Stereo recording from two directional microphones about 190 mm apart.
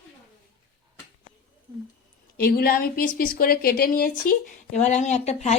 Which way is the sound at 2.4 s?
55° left (ahead or behind).